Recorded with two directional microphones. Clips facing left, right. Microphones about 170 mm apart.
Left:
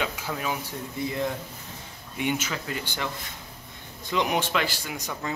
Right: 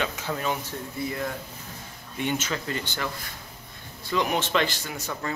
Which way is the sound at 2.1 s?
10° left (ahead or behind).